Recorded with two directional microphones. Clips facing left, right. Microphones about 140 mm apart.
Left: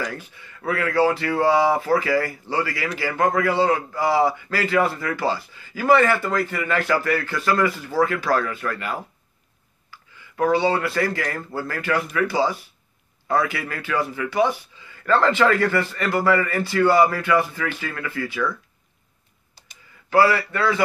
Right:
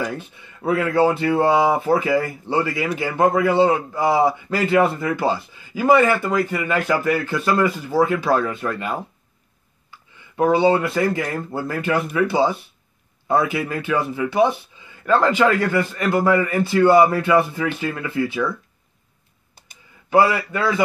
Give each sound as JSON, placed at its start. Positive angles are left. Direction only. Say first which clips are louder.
{"t": 0.0, "sound": "a man's voice", "louder": "right 3 dB", "side_deg": -20}
{"t": 20.1, "sound": "a man's voice", "louder": "right 1 dB", "side_deg": -20}